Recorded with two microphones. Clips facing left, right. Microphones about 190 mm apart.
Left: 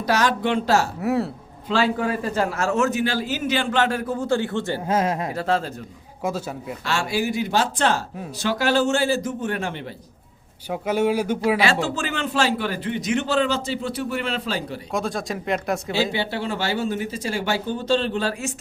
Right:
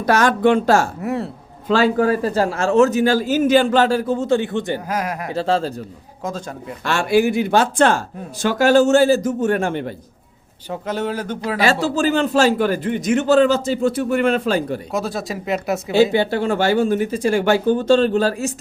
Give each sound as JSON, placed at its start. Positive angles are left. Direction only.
{"t": 0.0, "sound": "a man's voice", "side_deg": -50}
{"t": 1.0, "sound": "speech", "side_deg": 0}
{"t": 1.6, "sound": "a man's voice", "side_deg": -45}
{"t": 4.9, "sound": "a man's voice", "side_deg": 25}
{"t": 5.3, "sound": "a man's voice", "side_deg": -30}
{"t": 6.2, "sound": "speech", "side_deg": 10}
{"t": 6.8, "sound": "a man's voice", "side_deg": -55}
{"t": 10.7, "sound": "speech", "side_deg": 10}
{"t": 11.6, "sound": "a man's voice", "side_deg": -40}
{"t": 14.9, "sound": "speech", "side_deg": -5}
{"t": 16.1, "sound": "a man's voice", "side_deg": -50}